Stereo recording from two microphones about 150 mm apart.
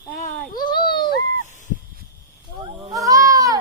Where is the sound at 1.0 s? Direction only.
55° left (ahead or behind).